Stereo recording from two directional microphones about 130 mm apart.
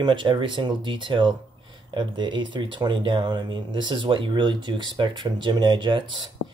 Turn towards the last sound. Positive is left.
turn(degrees=-35)  # may be behind; listen again after turning